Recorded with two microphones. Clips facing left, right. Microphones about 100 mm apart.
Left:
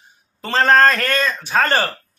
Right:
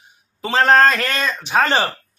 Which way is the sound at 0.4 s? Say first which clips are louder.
Even; 10° right (ahead or behind).